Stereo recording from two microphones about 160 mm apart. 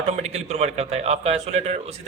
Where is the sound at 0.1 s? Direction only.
40° right (ahead or behind).